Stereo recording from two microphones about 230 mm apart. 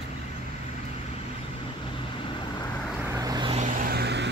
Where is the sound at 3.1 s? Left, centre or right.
Centre.